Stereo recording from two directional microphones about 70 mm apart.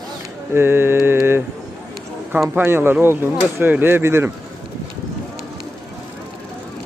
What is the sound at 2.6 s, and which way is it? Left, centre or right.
Speech, right.